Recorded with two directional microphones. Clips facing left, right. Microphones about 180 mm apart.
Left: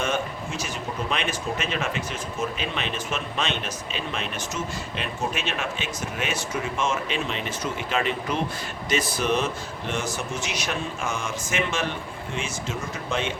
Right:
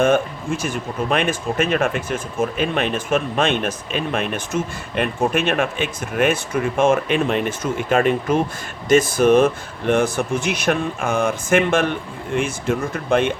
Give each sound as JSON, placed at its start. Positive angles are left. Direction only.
{"t": 0.0, "sound": "speech", "side_deg": -50}